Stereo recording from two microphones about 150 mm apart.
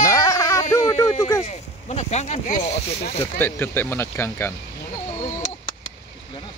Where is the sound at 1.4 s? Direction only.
45° left (ahead or behind).